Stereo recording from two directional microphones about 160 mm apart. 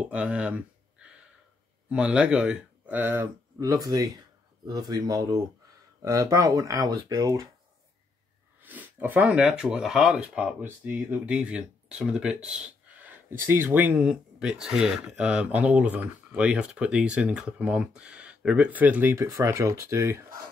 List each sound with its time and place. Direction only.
0.1 s speech: 10° right (ahead or behind)
8.5 s speech: 10° right (ahead or behind)